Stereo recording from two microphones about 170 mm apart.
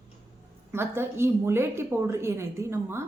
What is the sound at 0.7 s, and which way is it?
A woman's voice, 15° right (ahead or behind).